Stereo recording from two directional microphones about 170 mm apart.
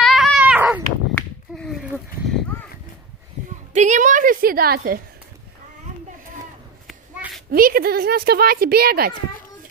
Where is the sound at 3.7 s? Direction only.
45° right (ahead or behind); by 5.0 s 65° right (ahead or behind).